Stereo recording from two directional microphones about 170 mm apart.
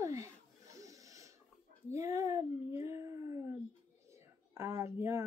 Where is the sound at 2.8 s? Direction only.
20° right (ahead or behind).